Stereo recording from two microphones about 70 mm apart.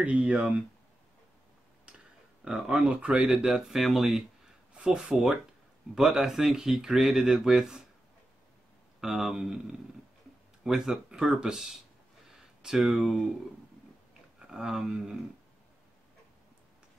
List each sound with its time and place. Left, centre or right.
0.0 s speech: centre
1.9 s a sound: centre
2.4 s speech: centre
4.7 s speech: centre
9.0 s speech: centre
12.3 s a sound: centre
14.4 s speech: centre